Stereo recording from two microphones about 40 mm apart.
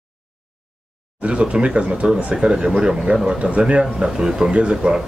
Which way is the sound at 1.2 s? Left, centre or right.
Right.